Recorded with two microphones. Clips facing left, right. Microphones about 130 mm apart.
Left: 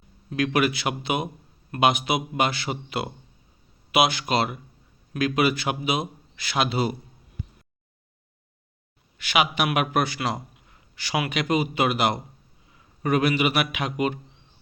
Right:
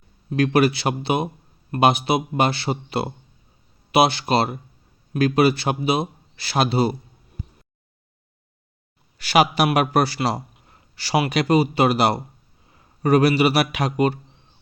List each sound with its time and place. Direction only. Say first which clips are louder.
0.3 s a man's voice: right 5 dB; 35° right (ahead or behind)
9.1 s a man's voice: right 6 dB; 40° right (ahead or behind)